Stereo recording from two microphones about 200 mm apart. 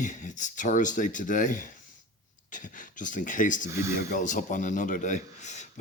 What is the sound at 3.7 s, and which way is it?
Speech, 15° right (ahead or behind).